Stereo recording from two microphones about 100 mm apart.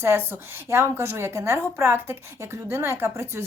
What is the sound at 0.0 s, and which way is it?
A woman's voice, 20° right (ahead or behind).